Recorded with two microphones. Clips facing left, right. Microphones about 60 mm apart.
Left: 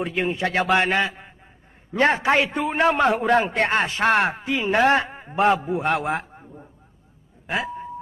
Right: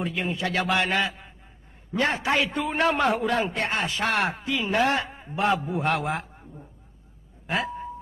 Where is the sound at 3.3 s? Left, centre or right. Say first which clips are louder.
Left 6 dB; left.